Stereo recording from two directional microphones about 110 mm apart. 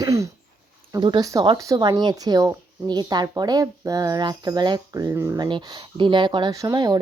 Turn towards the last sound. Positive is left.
turn(degrees=-40)  # may be behind; listen again after turning